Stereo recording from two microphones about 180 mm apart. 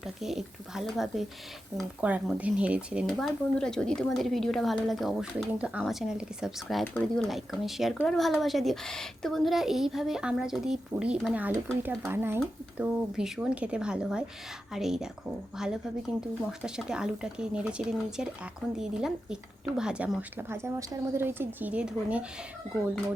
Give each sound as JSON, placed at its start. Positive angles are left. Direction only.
{"t": 0.0, "sound": "a woman's voice", "side_deg": 0}
{"t": 12.8, "sound": "a woman's voice", "side_deg": -5}